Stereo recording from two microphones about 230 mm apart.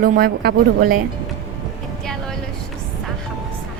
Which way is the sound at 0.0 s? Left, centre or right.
Right.